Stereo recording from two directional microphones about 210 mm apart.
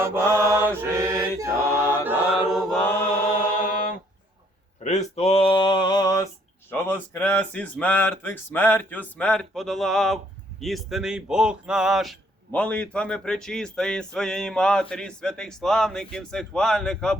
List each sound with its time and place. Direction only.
0.0 s mantra: 10° right (ahead or behind)
2.6 s chant: 10° left (ahead or behind)
3.3 s a sound: 40° left (ahead or behind)
4.8 s male singing: 35° left (ahead or behind); by 6.2 s 20° left (ahead or behind)
6.7 s speech: 10° left (ahead or behind)